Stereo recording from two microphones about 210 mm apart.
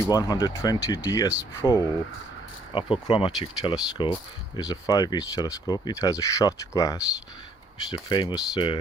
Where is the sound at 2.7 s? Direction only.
25° left (ahead or behind).